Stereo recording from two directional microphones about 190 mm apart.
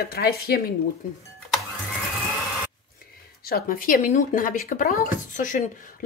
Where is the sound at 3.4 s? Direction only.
50° left (ahead or behind).